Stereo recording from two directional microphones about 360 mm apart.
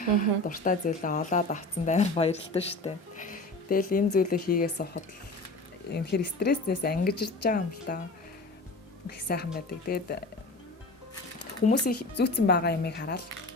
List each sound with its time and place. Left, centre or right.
0.0 s speech: left
9.0 s speech: left
11.9 s speech: left